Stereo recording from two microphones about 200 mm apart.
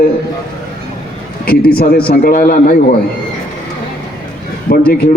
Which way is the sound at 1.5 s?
50° left (ahead or behind).